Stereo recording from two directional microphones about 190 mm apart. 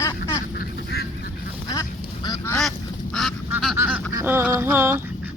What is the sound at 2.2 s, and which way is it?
Goose, 15° left (ahead or behind).